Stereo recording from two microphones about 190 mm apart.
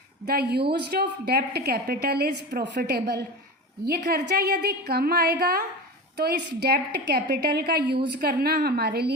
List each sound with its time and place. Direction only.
0.3 s a woman's voice: 60° right (ahead or behind)